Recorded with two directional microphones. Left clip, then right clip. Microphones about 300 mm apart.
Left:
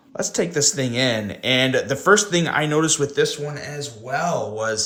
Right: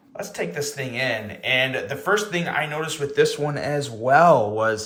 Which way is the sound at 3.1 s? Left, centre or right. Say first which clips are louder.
Right 1 dB; centre.